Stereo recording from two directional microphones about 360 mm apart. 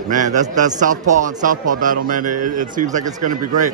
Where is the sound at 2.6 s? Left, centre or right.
Right.